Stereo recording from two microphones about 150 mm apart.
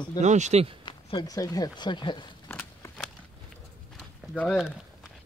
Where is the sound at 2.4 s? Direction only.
15° left (ahead or behind).